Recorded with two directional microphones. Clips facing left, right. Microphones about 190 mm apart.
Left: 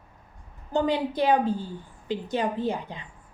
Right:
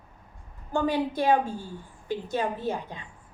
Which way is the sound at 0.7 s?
20° left (ahead or behind).